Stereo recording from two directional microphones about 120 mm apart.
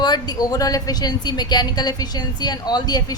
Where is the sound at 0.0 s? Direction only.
35° left (ahead or behind).